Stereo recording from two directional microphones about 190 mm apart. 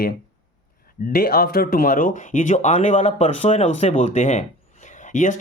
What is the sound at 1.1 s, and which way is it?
Speech, 50° left (ahead or behind).